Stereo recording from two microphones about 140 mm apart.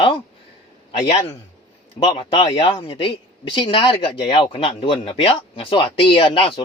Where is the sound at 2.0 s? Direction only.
40° left (ahead or behind).